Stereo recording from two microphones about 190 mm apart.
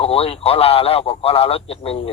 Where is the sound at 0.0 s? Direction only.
30° left (ahead or behind).